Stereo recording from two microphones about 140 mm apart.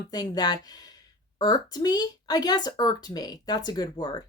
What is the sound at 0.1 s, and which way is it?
Speech, 30° left (ahead or behind).